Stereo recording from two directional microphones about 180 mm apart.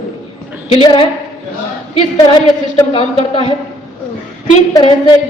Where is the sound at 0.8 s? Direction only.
30° left (ahead or behind).